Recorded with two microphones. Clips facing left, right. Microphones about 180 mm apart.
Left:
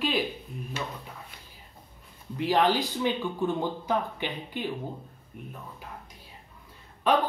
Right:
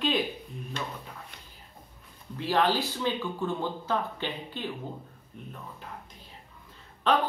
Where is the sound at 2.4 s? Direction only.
15° left (ahead or behind).